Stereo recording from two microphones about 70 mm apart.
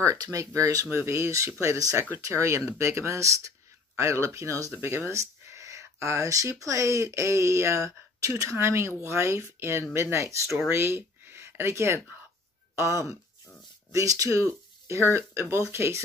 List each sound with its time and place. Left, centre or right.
0.0 s speech: right
0.9 s speech: right
4.7 s speech: right